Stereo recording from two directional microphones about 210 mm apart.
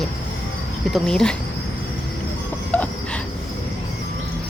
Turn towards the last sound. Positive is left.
turn(degrees=5)  # may be behind; listen again after turning